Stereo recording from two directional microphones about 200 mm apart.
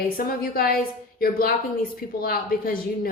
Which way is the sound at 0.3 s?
45° left (ahead or behind).